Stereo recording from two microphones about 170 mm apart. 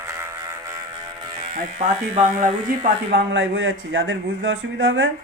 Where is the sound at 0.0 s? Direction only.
15° right (ahead or behind).